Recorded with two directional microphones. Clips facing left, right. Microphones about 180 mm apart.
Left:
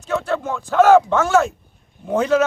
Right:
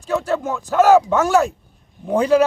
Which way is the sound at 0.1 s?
5° right (ahead or behind).